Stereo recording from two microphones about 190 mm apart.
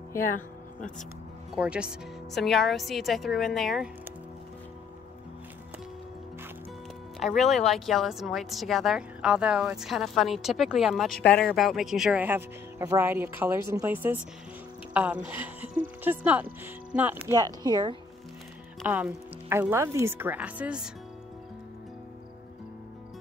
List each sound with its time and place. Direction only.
1.5 s speech: 5° right (ahead or behind)
7.2 s a woman's voice: centre (ahead or behind); by 17.9 s 20° right (ahead or behind)
18.8 s speech: 10° right (ahead or behind)